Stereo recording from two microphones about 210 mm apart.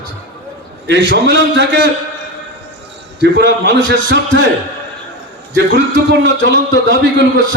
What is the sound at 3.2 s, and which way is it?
A man's voice, 55° right (ahead or behind).